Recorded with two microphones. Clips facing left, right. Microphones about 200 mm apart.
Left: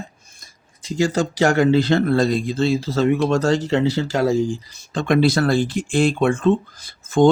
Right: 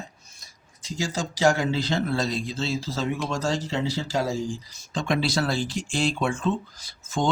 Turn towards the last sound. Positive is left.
turn(degrees=55)  # may be behind; listen again after turning